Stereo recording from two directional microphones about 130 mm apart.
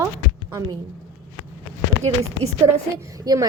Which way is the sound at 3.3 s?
30° right (ahead or behind).